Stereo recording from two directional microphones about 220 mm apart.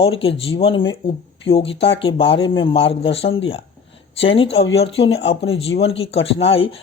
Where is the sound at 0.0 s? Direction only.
25° left (ahead or behind).